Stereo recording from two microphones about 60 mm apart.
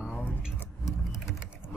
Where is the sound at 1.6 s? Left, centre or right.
Left.